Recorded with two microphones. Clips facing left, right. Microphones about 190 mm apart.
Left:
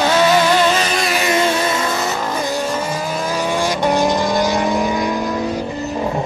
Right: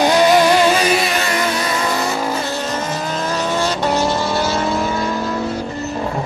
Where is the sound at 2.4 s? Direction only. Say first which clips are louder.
Left 2 dB; 10° left (ahead or behind).